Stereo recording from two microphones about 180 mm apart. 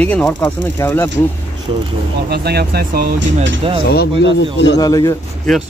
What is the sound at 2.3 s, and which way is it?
Speech, 60° right (ahead or behind).